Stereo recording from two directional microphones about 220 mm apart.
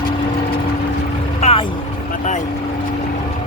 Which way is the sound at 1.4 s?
25° left (ahead or behind).